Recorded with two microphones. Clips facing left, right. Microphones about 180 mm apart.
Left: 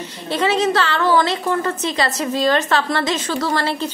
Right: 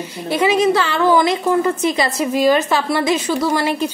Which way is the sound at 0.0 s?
10° right (ahead or behind).